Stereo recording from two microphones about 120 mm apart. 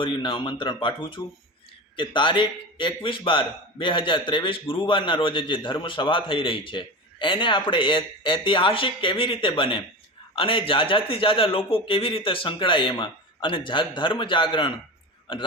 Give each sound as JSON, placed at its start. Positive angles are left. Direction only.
{"t": 0.0, "sound": "a man's voice", "side_deg": 45}